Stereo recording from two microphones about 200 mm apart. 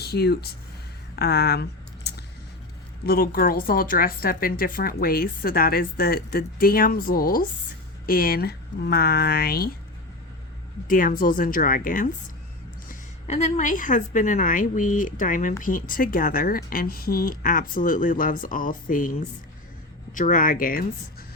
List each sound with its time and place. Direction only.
0.0 s speech: 55° left (ahead or behind)
2.0 s a sound: 55° left (ahead or behind)
3.1 s speech: 45° left (ahead or behind)
10.8 s a woman's voice: 45° left (ahead or behind)
20.1 s speech: 40° left (ahead or behind)